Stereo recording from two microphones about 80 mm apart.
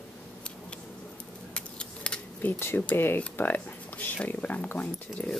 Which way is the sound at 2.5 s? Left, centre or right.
Left.